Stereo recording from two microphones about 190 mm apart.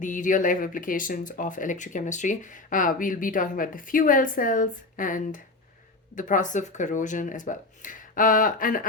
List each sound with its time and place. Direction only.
0.0 s speech: 40° left (ahead or behind)